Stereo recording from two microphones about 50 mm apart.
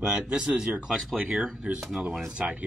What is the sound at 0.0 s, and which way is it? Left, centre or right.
Speech, centre.